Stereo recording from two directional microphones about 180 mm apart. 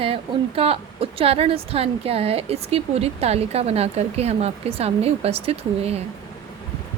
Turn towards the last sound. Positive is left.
turn(degrees=-35)  # may be behind; listen again after turning